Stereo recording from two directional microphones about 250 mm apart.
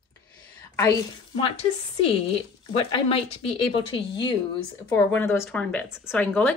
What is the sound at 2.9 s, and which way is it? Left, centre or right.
A woman's voice, left.